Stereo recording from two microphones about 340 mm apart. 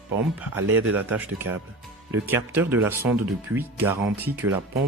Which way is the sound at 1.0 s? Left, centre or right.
Centre.